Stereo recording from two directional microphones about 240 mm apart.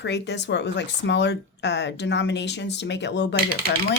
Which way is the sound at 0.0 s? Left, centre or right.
Left.